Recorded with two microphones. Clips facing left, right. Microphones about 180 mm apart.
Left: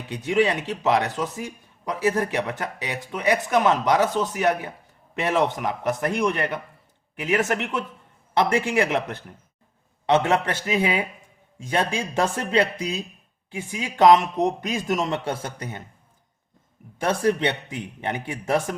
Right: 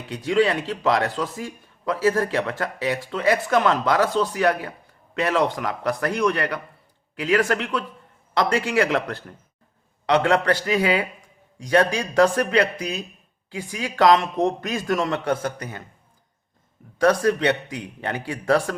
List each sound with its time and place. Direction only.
0.1 s a man's voice: 20° left (ahead or behind)
17.0 s a man's voice: 25° left (ahead or behind)